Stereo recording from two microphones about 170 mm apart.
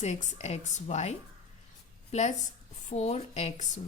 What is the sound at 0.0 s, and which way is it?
A woman's voice, 45° left (ahead or behind).